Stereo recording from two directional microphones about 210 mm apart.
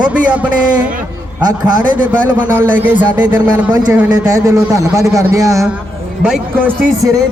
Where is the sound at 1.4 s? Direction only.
20° right (ahead or behind).